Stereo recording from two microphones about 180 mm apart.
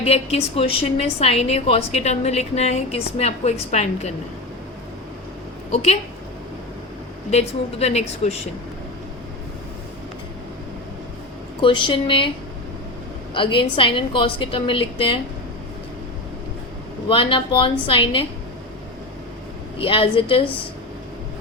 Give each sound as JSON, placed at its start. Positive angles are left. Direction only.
{"t": 0.0, "sound": "a woman's voice", "side_deg": 35}
{"t": 5.7, "sound": "a woman's voice", "side_deg": 35}
{"t": 7.3, "sound": "a woman's voice", "side_deg": 35}
{"t": 11.6, "sound": "a woman's voice", "side_deg": 25}
{"t": 13.3, "sound": "a woman's voice", "side_deg": 30}
{"t": 17.1, "sound": "a woman's voice", "side_deg": 30}
{"t": 19.8, "sound": "a woman's voice", "side_deg": 30}